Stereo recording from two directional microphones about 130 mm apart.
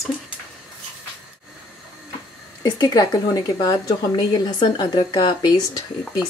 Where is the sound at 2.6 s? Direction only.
30° left (ahead or behind).